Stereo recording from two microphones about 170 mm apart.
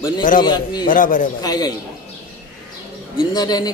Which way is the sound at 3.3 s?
25° left (ahead or behind).